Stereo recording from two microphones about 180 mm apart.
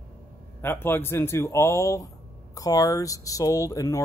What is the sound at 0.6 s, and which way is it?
Speech, 10° left (ahead or behind).